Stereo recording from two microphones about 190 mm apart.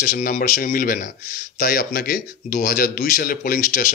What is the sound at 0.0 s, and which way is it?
Speech, 45° left (ahead or behind).